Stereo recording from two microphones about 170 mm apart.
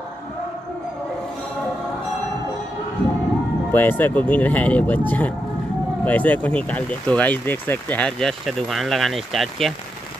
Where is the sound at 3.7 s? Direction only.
10° left (ahead or behind).